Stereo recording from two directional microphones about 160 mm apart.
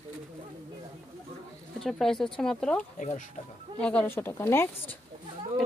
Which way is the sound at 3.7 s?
5° left (ahead or behind).